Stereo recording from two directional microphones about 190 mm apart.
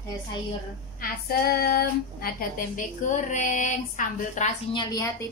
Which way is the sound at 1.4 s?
55° left (ahead or behind).